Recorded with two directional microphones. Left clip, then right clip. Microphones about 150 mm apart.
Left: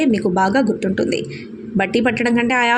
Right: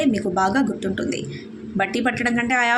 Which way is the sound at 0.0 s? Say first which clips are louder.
Left 3 dB; 25° left (ahead or behind).